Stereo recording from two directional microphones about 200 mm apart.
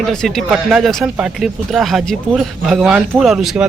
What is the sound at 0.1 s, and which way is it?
Speech, centre (ahead or behind).